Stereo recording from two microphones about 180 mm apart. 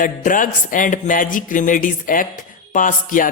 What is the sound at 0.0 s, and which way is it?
Speech, 50° left (ahead or behind).